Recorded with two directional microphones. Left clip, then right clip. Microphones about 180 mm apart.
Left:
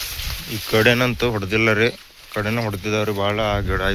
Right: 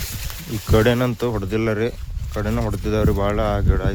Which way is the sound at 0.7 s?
20° right (ahead or behind).